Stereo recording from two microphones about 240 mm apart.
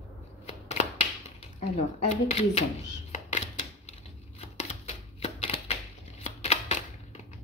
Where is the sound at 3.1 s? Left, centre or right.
Left.